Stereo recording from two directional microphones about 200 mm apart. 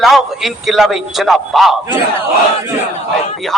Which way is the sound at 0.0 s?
Centre (ahead or behind).